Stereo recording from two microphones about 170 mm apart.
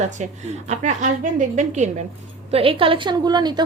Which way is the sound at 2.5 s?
30° right (ahead or behind).